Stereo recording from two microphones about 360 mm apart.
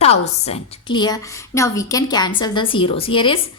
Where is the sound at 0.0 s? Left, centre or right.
Centre.